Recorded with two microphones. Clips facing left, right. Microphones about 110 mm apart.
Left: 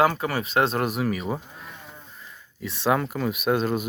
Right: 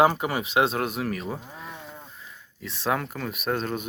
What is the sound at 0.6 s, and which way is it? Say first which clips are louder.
Speech: left 1 dB; centre (ahead or behind).